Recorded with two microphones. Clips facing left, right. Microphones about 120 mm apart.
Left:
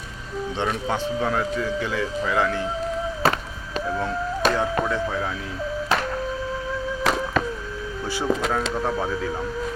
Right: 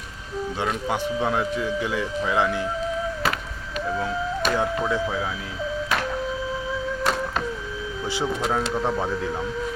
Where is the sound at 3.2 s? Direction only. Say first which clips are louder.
Left 4 dB; 35° left (ahead or behind).